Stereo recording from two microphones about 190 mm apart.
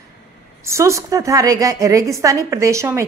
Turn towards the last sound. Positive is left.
turn(degrees=-15)  # may be behind; listen again after turning